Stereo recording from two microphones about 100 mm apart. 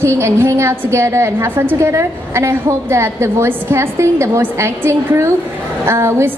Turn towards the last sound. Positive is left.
turn(degrees=-25)  # may be behind; listen again after turning